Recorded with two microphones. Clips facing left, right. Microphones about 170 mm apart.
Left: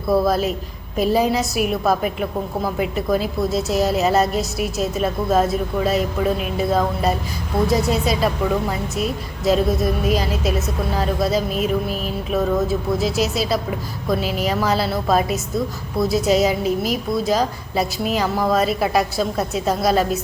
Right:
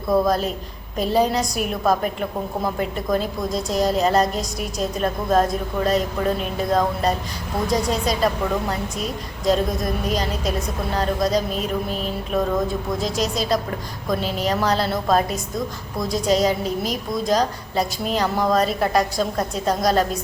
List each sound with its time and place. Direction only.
0.1 s music: 5° left (ahead or behind)